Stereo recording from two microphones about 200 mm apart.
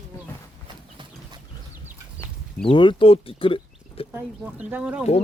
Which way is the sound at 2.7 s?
25° left (ahead or behind).